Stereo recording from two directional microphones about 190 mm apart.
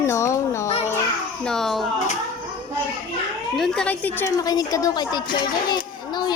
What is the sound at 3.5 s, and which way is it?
A woman's voice, 5° left (ahead or behind).